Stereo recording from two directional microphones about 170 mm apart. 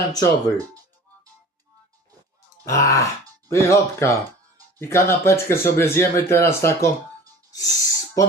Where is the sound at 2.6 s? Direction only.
20° left (ahead or behind).